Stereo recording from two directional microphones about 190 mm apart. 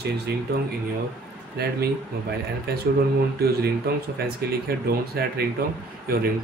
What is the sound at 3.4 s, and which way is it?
Speech, 55° right (ahead or behind).